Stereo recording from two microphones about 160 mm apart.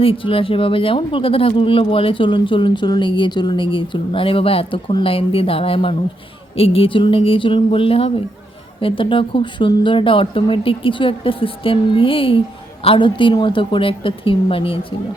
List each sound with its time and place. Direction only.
0.0 s speech: 35° left (ahead or behind)